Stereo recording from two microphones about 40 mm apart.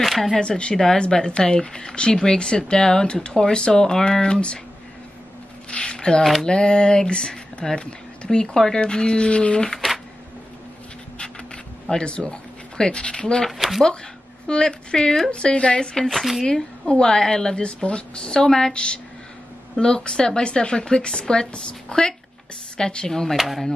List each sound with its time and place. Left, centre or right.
0.0 s speech: centre
0.4 s speech: left
0.7 s speech: centre
5.7 s a sound: left
6.4 s speech: left
11.9 s speech: left
13.5 s speech: centre
14.5 s speech: left
16.1 s speech: centre
16.8 s speech: left
23.3 s speech: centre